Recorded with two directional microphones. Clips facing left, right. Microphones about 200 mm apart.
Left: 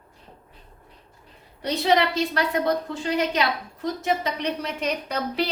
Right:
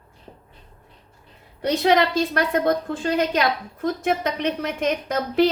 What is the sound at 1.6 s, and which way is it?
A woman's voice, 55° right (ahead or behind).